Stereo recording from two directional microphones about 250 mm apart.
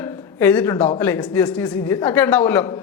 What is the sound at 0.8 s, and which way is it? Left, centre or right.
Speech, left.